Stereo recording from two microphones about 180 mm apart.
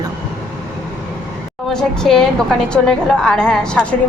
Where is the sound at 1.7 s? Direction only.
5° left (ahead or behind).